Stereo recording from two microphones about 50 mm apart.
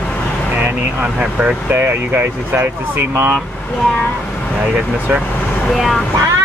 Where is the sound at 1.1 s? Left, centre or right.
Right.